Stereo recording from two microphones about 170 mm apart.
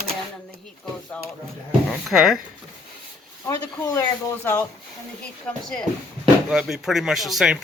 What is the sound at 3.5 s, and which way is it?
Speech, 20° left (ahead or behind).